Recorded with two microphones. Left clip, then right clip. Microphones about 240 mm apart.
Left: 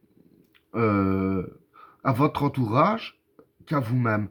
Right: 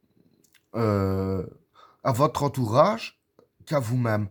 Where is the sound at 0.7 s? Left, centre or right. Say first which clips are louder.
Left 2 dB; right.